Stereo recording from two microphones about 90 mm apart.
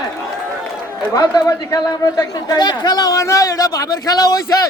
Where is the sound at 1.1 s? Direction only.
45° left (ahead or behind).